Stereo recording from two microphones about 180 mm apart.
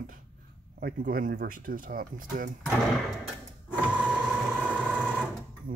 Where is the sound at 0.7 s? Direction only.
50° right (ahead or behind).